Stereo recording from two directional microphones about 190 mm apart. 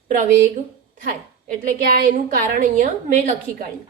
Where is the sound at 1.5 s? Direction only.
45° right (ahead or behind).